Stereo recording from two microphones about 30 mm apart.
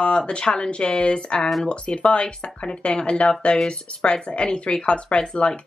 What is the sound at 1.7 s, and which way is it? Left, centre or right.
Speech, left.